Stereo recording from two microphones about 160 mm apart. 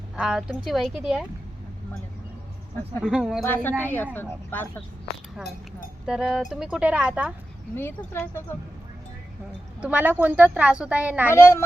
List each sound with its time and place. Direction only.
0.2 s speech: 5° right (ahead or behind)
3.0 s speech: 5° right (ahead or behind)
3.4 s speech: 10° left (ahead or behind)
6.1 s speech: 5° right (ahead or behind)
7.8 s speech: 10° left (ahead or behind)
9.8 s a woman's voice: 10° right (ahead or behind)
11.3 s speech: 15° left (ahead or behind)